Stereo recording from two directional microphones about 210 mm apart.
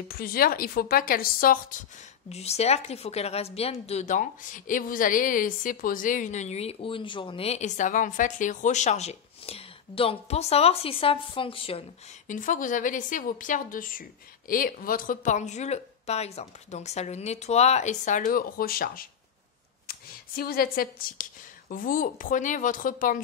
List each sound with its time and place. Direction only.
0.1 s speech: 45° left (ahead or behind)
2.2 s a woman's voice: 30° left (ahead or behind)
12.3 s a woman's voice: 40° left (ahead or behind)